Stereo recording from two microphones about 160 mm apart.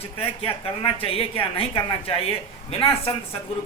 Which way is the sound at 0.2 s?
35° left (ahead or behind).